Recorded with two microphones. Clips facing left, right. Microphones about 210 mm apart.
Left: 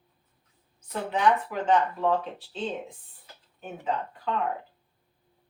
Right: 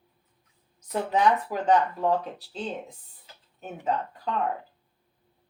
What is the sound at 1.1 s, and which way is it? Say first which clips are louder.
Speech: right 1 dB; 40° right (ahead or behind).